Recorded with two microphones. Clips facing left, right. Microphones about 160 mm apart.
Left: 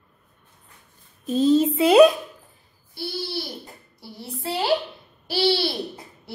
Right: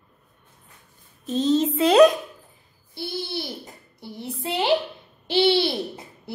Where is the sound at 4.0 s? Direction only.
20° right (ahead or behind).